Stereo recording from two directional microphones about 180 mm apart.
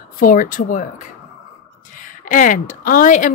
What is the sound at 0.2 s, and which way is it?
A woman's voice, 50° left (ahead or behind).